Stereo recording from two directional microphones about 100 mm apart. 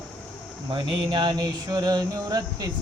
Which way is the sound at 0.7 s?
50° right (ahead or behind).